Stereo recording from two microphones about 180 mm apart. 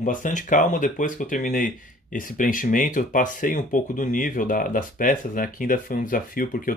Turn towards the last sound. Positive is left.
turn(degrees=50)  # may be behind; listen again after turning